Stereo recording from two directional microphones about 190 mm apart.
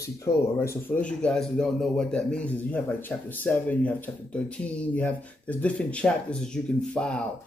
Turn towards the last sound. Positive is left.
turn(degrees=5)  # may be behind; listen again after turning